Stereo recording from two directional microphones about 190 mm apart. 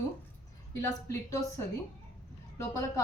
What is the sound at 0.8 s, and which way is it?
Speech, 20° left (ahead or behind).